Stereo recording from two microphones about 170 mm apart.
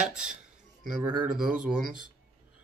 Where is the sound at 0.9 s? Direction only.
Centre (ahead or behind).